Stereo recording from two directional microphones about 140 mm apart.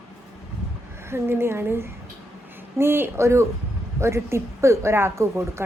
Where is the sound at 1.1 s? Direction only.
15° right (ahead or behind).